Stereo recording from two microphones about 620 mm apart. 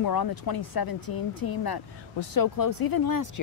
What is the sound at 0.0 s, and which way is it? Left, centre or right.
Speech, left.